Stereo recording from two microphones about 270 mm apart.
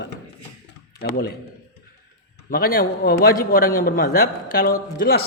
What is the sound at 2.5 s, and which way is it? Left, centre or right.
A man's voice, left.